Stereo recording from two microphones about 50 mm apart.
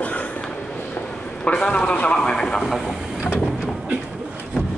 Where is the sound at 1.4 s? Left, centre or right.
Centre.